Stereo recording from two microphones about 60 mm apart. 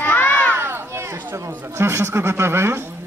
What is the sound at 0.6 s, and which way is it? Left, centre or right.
Speech, right.